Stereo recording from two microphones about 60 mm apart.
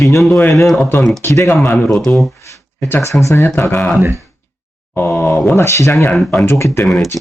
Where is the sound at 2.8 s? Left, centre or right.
Left.